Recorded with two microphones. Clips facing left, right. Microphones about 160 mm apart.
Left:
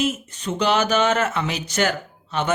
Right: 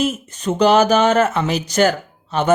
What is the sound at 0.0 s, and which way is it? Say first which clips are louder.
Speech: right 4 dB; 45° right (ahead or behind).